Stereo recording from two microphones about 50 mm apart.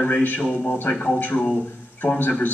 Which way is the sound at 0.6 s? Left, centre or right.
Left.